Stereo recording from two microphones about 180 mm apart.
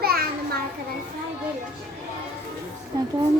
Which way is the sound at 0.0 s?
55° right (ahead or behind).